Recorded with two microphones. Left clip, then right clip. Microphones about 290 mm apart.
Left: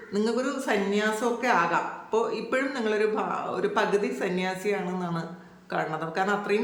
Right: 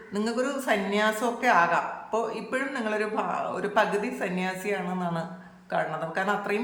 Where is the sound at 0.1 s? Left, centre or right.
Centre.